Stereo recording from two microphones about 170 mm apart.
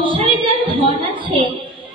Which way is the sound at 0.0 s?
30° right (ahead or behind).